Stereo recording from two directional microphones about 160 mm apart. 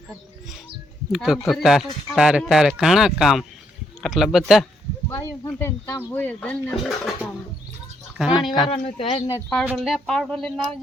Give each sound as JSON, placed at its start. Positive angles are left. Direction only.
{"t": 1.1, "sound": "speech", "side_deg": -5}
{"t": 5.0, "sound": "speech", "side_deg": 20}
{"t": 8.7, "sound": "speech", "side_deg": 35}
{"t": 9.6, "sound": "speech", "side_deg": -5}